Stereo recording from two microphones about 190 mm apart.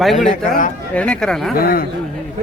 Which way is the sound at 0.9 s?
5° left (ahead or behind).